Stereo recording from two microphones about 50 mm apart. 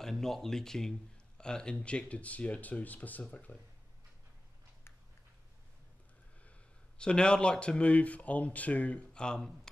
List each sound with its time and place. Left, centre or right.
0.0 s speech: centre; by 3.5 s left
7.0 s speech: centre